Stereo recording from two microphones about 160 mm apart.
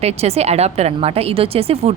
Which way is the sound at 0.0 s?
40° right (ahead or behind).